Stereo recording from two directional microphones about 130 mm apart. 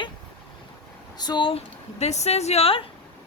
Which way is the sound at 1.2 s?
35° left (ahead or behind).